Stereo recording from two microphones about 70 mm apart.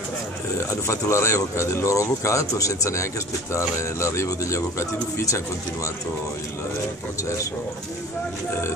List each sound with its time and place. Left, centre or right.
0.6 s speech: left